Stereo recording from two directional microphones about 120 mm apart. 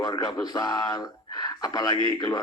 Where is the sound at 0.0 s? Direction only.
35° left (ahead or behind).